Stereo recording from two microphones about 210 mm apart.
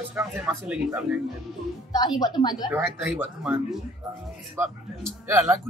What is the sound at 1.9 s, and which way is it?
Speech, 20° left (ahead or behind).